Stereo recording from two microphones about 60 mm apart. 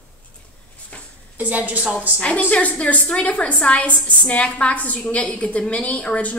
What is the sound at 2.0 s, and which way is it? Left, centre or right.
A woman's voice, centre.